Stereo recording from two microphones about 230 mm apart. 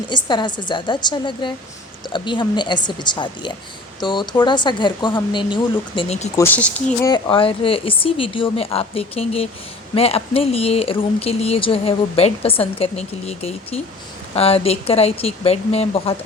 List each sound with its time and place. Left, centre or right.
0.1 s speech: centre
6.3 s speech: centre
7.1 s speech: left